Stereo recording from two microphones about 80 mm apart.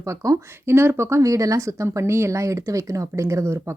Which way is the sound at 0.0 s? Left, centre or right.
Right.